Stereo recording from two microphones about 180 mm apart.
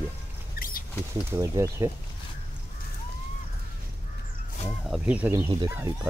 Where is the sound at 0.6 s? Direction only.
50° left (ahead or behind).